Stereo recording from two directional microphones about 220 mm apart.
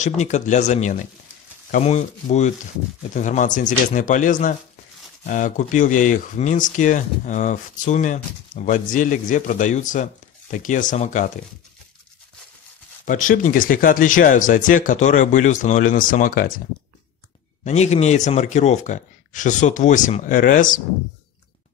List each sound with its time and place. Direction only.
0.0 s speech: 35° left (ahead or behind)
13.0 s speech: 35° left (ahead or behind)
17.6 s speech: 30° left (ahead or behind)